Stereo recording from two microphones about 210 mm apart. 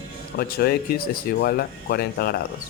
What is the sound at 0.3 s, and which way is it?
A man's voice, 50° left (ahead or behind).